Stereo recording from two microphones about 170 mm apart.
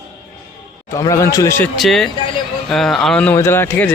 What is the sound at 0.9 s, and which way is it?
Speech, 20° left (ahead or behind).